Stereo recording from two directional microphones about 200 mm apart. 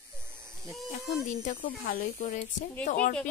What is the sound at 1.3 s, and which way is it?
Speech, 35° left (ahead or behind).